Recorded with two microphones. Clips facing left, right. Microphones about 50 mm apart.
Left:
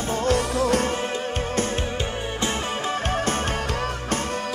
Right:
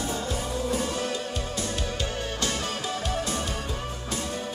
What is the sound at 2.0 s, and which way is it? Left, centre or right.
Music, left.